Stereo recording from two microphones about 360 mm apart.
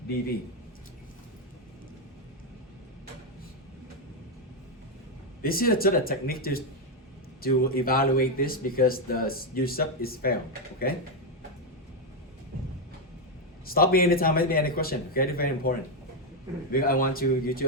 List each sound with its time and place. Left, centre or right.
5.4 s speech: left
13.7 s speech: left
16.7 s speech: left